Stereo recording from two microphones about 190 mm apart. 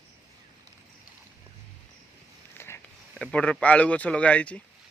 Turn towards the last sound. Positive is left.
turn(degrees=5)  # may be behind; listen again after turning